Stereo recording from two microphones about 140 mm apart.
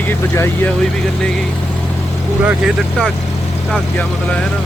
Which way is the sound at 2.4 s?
Centre (ahead or behind).